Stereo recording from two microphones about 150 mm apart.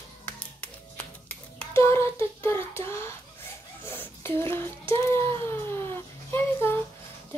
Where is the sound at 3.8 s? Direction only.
15° left (ahead or behind).